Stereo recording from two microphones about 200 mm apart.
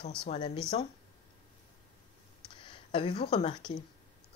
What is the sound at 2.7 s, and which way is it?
Speech, 25° left (ahead or behind).